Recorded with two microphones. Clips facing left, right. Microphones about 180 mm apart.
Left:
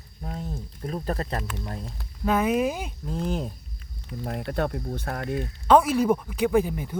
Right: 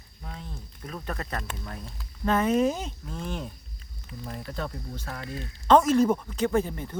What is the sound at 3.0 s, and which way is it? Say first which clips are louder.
Speech: left 9 dB; 40° left (ahead or behind).